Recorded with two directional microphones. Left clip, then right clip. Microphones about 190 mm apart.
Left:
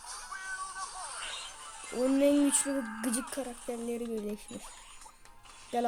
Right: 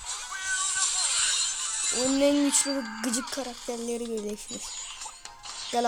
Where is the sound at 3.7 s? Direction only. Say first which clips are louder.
Right 4 dB; 10° right (ahead or behind).